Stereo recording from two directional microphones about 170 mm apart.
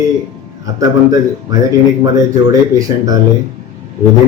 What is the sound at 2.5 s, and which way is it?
Speech, 20° right (ahead or behind).